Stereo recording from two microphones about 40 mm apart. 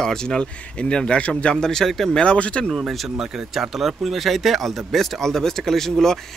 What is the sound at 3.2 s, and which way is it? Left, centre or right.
Speech, centre.